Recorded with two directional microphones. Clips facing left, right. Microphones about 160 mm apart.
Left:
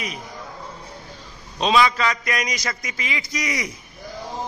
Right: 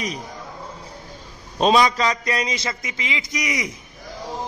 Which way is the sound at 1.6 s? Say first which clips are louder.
Right 2 dB; 40° right (ahead or behind).